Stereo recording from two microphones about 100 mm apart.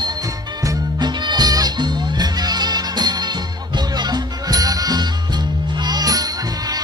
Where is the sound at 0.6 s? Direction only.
45° right (ahead or behind).